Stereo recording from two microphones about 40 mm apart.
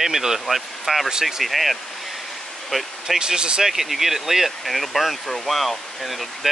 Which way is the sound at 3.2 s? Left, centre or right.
Right.